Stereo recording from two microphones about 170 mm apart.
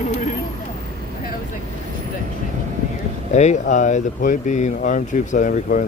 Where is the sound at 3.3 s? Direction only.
45° left (ahead or behind).